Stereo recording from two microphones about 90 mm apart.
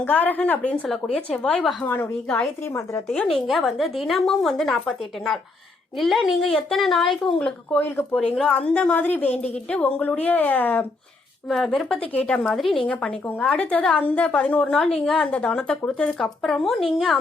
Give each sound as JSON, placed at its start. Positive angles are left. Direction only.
{"t": 0.0, "sound": "a woman's voice", "side_deg": 20}
{"t": 7.8, "sound": "a woman's voice", "side_deg": 20}
{"t": 11.4, "sound": "a woman's voice", "side_deg": 0}